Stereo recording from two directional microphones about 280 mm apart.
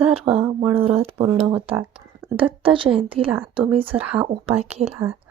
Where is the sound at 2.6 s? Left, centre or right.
Centre.